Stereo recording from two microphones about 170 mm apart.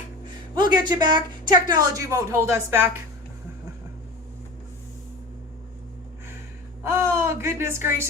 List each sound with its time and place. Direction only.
0.5 s speech: 25° right (ahead or behind)
6.8 s speech: 15° right (ahead or behind)